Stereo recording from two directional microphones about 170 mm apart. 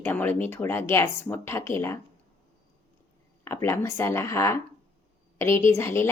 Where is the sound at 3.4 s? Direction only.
15° left (ahead or behind).